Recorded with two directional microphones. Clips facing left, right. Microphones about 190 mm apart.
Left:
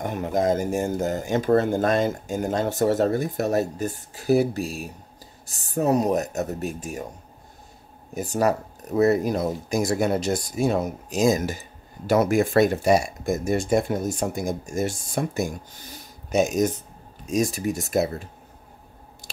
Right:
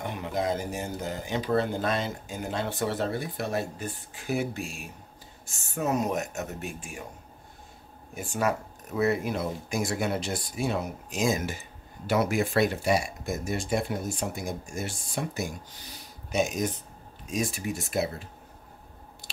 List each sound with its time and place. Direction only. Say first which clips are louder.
0.0 s speech: left 6 dB; 45° left (ahead or behind)
8.1 s speech: left 6 dB; 40° left (ahead or behind)